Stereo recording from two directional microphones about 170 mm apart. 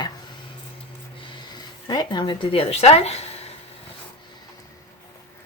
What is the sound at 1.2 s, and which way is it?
Speech, 25° left (ahead or behind).